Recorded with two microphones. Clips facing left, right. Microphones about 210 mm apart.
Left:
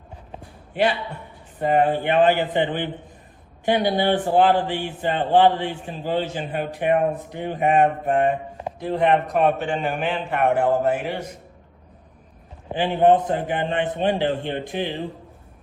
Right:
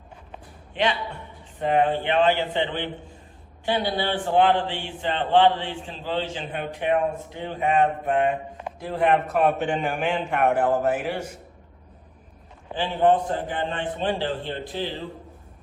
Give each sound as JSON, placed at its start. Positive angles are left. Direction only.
{"t": 0.7, "sound": "a man's voice", "side_deg": 5}
{"t": 2.0, "sound": "speech", "side_deg": 45}
{"t": 3.8, "sound": "speech", "side_deg": 50}
{"t": 4.3, "sound": "a man's voice", "side_deg": 5}
{"t": 6.6, "sound": "speech", "side_deg": 45}
{"t": 8.8, "sound": "a man's voice", "side_deg": -5}
{"t": 10.5, "sound": "a man's voice", "side_deg": 10}
{"t": 10.8, "sound": "a man's voice", "side_deg": -10}
{"t": 12.7, "sound": "a man's voice", "side_deg": 15}